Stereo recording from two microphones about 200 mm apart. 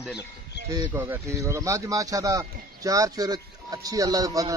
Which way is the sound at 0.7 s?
15° right (ahead or behind).